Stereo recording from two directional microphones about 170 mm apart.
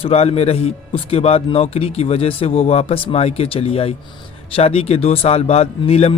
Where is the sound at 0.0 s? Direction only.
35° left (ahead or behind).